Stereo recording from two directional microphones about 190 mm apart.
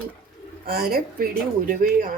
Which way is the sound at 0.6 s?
55° right (ahead or behind).